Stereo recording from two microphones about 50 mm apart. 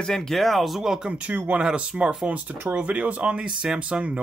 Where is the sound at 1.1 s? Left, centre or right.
Right.